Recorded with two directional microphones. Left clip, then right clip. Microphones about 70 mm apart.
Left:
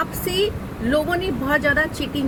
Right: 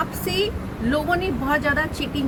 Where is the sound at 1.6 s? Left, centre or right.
Right.